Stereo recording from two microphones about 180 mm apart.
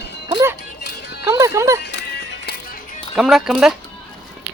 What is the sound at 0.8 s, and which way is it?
Music, 65° left (ahead or behind).